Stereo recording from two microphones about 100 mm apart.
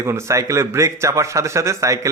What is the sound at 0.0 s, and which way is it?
Speech, 30° right (ahead or behind).